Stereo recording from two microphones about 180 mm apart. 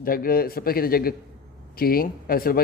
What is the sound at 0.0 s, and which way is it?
Speech, 55° left (ahead or behind).